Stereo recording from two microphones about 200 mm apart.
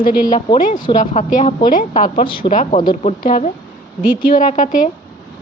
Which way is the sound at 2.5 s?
40° left (ahead or behind).